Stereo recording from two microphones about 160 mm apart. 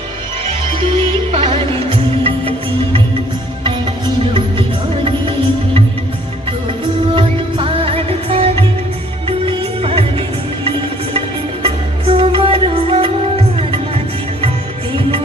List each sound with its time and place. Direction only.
0.7 s music: 35° right (ahead or behind)
3.6 s music: 30° right (ahead or behind)
7.1 s music: 35° right (ahead or behind)
11.6 s music: 35° right (ahead or behind)